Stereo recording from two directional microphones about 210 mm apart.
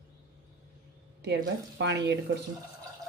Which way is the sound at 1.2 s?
55° right (ahead or behind).